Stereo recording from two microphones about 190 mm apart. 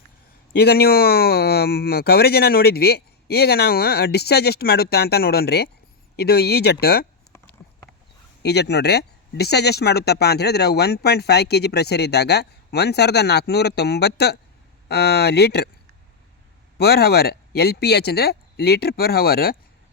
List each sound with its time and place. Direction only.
0.5 s speech: 55° left (ahead or behind)
8.4 s speech: 60° left (ahead or behind)
16.7 s speech: 55° left (ahead or behind)